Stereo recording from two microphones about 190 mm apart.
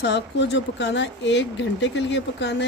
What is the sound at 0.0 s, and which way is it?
Speech, 65° left (ahead or behind).